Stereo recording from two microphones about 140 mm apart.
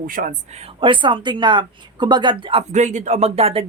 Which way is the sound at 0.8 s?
35° right (ahead or behind).